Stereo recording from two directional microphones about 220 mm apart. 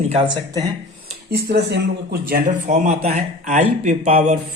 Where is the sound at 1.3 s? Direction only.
50° right (ahead or behind); by 3.6 s 30° right (ahead or behind).